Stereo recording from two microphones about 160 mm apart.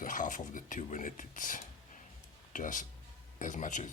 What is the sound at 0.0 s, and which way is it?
Speech, 55° left (ahead or behind).